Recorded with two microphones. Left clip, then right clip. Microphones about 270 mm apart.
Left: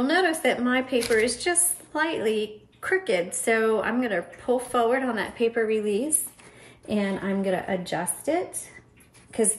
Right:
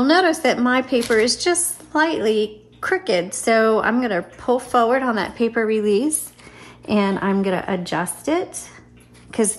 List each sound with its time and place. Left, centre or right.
0.0 s a woman's voice: right